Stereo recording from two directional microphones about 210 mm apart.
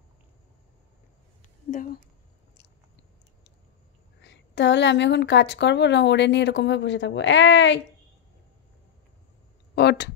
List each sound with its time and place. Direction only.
4.2 s a woman's voice: 55° left (ahead or behind)
9.8 s speech: 50° left (ahead or behind)